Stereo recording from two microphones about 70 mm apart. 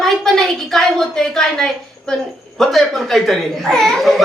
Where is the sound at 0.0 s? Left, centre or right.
Centre.